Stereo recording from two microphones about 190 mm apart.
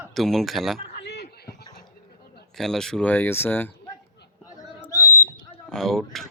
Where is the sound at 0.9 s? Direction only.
60° left (ahead or behind).